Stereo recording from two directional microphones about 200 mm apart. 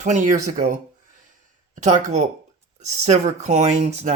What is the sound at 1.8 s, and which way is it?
Speech, 35° right (ahead or behind).